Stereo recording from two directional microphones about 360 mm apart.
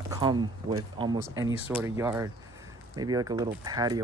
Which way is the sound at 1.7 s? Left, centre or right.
Centre.